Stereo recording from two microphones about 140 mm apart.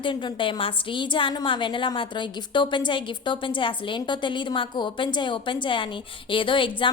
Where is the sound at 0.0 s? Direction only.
35° left (ahead or behind).